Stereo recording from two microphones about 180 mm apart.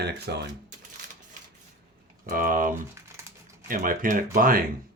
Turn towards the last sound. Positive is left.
turn(degrees=-50)  # may be behind; listen again after turning